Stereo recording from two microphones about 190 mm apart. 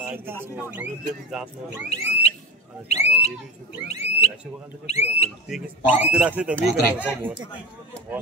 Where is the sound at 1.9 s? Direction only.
35° left (ahead or behind).